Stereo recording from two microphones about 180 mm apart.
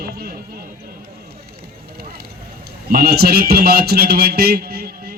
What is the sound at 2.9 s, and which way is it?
Speech, 60° right (ahead or behind).